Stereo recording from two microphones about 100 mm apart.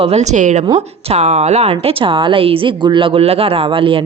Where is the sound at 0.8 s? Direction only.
90° right.